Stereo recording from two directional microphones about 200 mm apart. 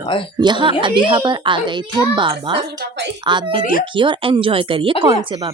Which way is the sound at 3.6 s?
45° left (ahead or behind).